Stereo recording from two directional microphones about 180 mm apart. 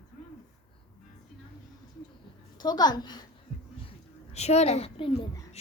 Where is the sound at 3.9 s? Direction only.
35° left (ahead or behind).